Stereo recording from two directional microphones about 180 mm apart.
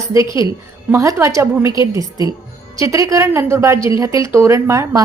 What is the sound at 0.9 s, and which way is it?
A woman's voice, 15° right (ahead or behind).